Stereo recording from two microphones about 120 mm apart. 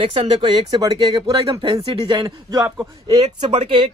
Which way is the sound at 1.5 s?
45° right (ahead or behind).